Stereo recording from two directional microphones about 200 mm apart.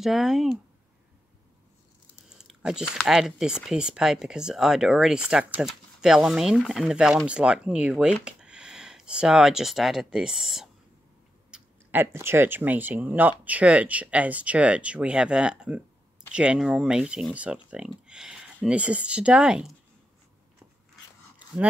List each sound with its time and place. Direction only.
0.0 s speech: centre (ahead or behind)
2.2 s speech: 5° right (ahead or behind)